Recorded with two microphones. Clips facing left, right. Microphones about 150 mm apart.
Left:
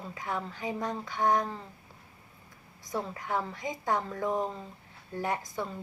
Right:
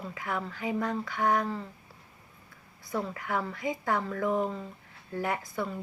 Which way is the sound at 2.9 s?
20° left (ahead or behind).